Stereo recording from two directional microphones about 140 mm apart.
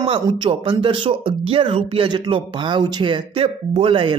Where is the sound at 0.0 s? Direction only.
40° right (ahead or behind).